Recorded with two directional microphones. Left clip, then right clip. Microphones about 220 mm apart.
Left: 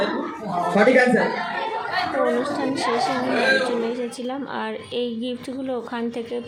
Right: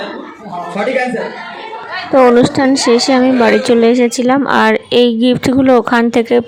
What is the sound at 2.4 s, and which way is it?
Speech, 50° right (ahead or behind).